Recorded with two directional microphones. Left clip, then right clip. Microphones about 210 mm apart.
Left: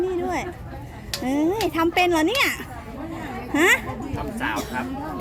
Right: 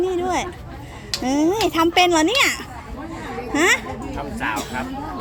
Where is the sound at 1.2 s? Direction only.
15° right (ahead or behind).